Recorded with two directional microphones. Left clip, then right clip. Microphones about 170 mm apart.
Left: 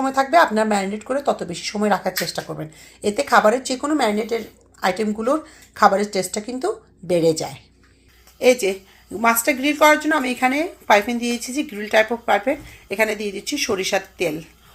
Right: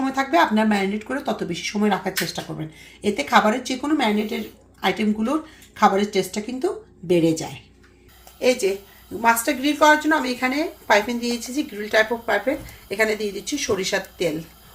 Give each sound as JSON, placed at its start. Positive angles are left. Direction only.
{"t": 0.0, "sound": "a woman's voice", "side_deg": 35}